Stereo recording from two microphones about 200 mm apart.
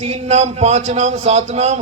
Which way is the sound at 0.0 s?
35° right (ahead or behind).